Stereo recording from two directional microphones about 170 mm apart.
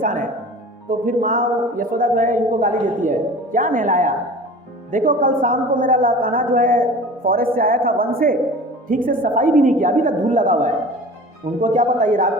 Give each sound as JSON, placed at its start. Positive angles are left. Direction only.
{"t": 0.0, "sound": "music", "side_deg": -55}
{"t": 0.9, "sound": "a woman's voice", "side_deg": -55}